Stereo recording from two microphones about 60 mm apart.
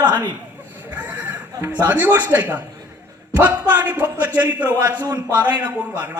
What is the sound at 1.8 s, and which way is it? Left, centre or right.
Speech, right.